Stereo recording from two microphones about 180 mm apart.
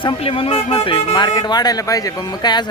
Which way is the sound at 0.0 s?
30° left (ahead or behind).